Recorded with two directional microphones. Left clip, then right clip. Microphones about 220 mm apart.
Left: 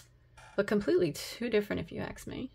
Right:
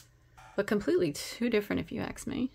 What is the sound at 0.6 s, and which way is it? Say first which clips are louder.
Speech: even; 5° right (ahead or behind).